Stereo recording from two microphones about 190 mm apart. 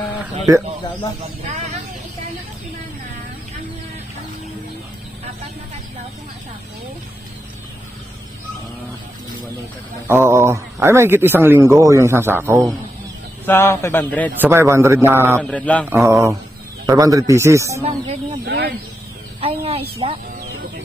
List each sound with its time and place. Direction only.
10.0 s a man's voice: 15° right (ahead or behind)
13.5 s a man's voice: 10° left (ahead or behind)
14.4 s a man's voice: 15° right (ahead or behind)
15.4 s a man's voice: 5° left (ahead or behind)
16.1 s a man's voice: 15° right (ahead or behind)
18.4 s speech: 55° right (ahead or behind)
19.4 s a woman's voice: 30° right (ahead or behind)